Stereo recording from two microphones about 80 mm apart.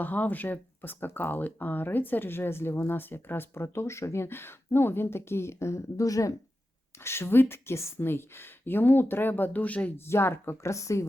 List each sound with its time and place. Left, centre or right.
0.0 s speech: left
7.0 s speech: left
10.1 s speech: left